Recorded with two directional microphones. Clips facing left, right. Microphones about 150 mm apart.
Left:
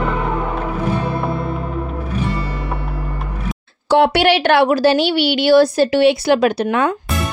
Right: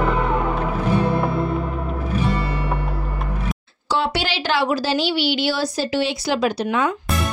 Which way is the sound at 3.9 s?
60° left (ahead or behind).